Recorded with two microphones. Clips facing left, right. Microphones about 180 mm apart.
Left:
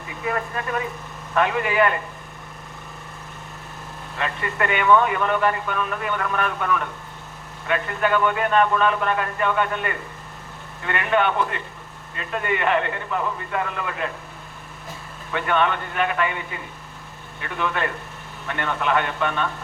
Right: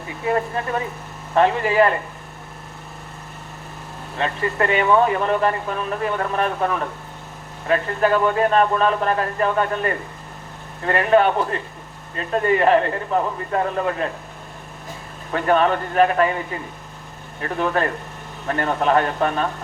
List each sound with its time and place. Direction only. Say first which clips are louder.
0.3 s speech: right 5 dB; 30° right (ahead or behind)
4.2 s speech: right 4 dB; 30° right (ahead or behind)
15.3 s speech: right 4 dB; 35° right (ahead or behind)